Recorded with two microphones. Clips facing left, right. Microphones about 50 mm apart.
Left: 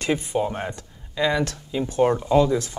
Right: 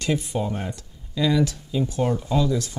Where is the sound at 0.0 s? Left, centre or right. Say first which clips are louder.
Left 2 dB; left.